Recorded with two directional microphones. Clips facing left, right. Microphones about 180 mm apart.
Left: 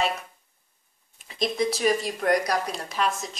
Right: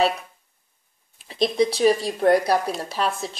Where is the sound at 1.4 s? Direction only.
30° right (ahead or behind).